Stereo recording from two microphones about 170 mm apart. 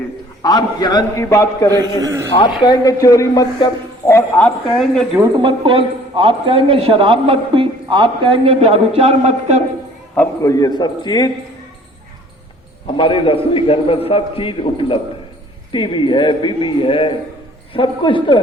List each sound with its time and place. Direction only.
0.4 s a man's voice: 25° left (ahead or behind)
1.8 s a man's voice: 20° right (ahead or behind)
2.6 s speech: 25° left (ahead or behind)
4.4 s speech: 5° left (ahead or behind)
5.4 s speech: 30° right (ahead or behind)
10.2 s speech: 20° left (ahead or behind)
13.0 s a man's voice: 30° left (ahead or behind)